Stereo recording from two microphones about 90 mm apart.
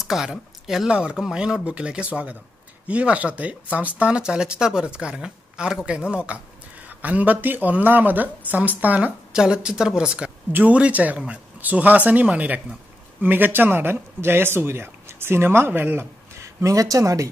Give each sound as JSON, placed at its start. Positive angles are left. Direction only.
{"t": 0.0, "sound": "speech", "side_deg": -5}
{"t": 16.3, "sound": "speech", "side_deg": -35}